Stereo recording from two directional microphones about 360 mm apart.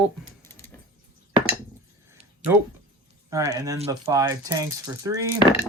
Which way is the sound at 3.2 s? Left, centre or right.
Centre.